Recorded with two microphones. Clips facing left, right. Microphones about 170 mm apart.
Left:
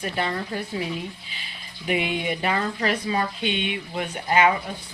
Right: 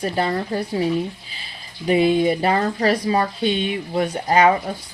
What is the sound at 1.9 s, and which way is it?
Speech, 35° right (ahead or behind).